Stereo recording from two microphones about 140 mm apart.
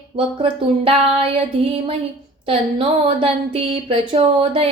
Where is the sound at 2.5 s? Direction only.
40° right (ahead or behind).